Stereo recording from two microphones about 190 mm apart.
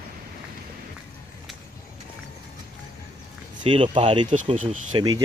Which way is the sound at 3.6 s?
25° right (ahead or behind).